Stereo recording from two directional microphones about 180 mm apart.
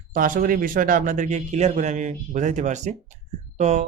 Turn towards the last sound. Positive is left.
turn(degrees=-40)  # may be behind; listen again after turning